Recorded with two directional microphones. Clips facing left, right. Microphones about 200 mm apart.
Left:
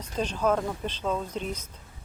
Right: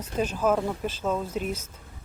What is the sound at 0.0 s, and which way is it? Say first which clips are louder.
Speech: right 2 dB; 5° right (ahead or behind).